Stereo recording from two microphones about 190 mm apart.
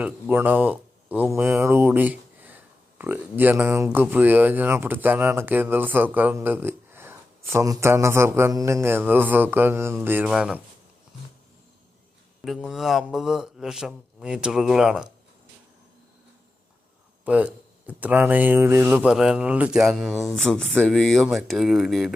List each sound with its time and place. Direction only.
0.0 s speech: 10° right (ahead or behind)
12.5 s speech: centre (ahead or behind)
17.2 s speech: 5° right (ahead or behind)